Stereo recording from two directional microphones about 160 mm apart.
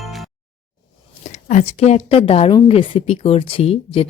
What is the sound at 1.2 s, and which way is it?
Speech, 50° left (ahead or behind).